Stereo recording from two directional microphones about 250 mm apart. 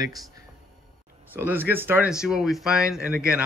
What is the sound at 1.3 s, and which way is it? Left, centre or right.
Speech, centre.